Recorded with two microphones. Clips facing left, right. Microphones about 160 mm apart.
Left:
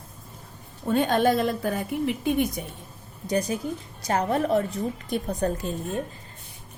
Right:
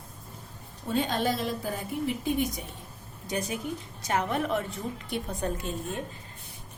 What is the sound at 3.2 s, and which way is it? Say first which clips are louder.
A woman's voice: left 6 dB; 40° left (ahead or behind).